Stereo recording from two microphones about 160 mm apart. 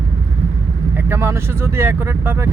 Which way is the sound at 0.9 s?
15° right (ahead or behind).